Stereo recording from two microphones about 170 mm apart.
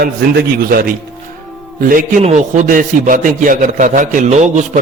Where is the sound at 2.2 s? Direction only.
45° right (ahead or behind).